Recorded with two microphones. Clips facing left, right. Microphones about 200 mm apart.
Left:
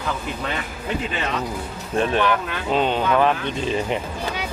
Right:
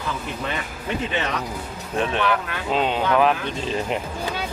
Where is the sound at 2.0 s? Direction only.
Centre (ahead or behind).